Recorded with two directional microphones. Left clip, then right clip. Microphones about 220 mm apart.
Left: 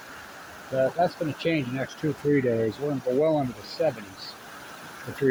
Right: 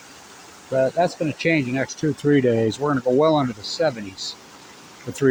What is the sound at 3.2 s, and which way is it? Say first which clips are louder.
Speech: right 6 dB; 45° right (ahead or behind).